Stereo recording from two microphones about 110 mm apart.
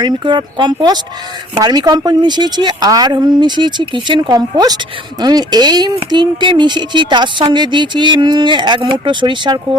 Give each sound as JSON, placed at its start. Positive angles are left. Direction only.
{"t": 0.0, "sound": "speech", "side_deg": -45}